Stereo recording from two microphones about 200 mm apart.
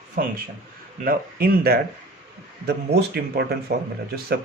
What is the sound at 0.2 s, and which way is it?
Speech, 45° right (ahead or behind).